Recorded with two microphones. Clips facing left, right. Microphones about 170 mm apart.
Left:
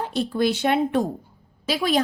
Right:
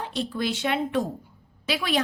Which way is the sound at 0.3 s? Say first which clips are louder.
Left 6 dB; 60° left (ahead or behind).